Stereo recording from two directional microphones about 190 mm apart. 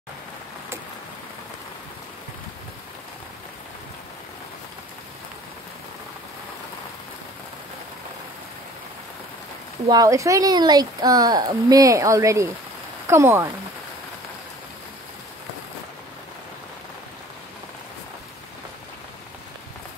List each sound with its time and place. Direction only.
9.8 s speech: 20° right (ahead or behind)